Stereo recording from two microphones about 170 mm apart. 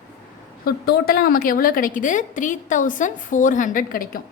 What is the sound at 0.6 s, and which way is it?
A woman's voice, 65° left (ahead or behind).